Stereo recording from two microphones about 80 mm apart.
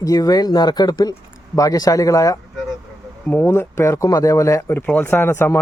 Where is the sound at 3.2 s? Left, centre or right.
Left.